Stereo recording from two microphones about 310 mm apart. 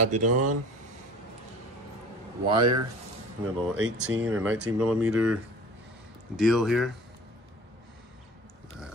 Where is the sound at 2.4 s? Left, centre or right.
Centre.